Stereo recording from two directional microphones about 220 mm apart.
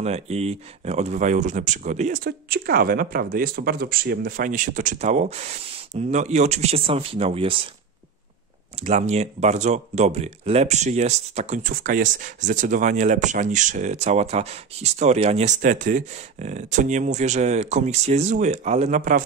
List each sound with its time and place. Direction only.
0.0 s speech: 30° right (ahead or behind)
8.8 s speech: 30° right (ahead or behind)